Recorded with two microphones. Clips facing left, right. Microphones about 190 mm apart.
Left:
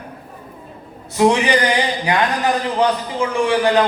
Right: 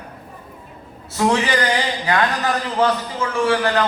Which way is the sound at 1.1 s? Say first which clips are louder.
Left 4 dB; 15° left (ahead or behind).